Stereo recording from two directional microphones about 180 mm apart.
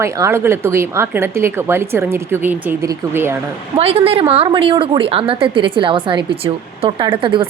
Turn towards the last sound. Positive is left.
turn(degrees=-30)  # may be behind; listen again after turning